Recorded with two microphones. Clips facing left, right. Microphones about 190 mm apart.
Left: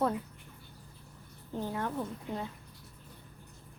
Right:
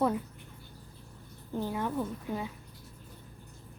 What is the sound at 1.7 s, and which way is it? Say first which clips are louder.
Speech: right 2 dB; 10° right (ahead or behind).